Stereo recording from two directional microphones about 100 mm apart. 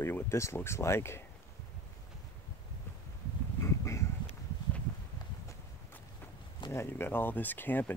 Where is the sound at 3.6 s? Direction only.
30° left (ahead or behind).